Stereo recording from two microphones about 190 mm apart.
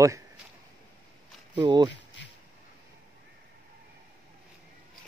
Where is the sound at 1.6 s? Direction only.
25° right (ahead or behind).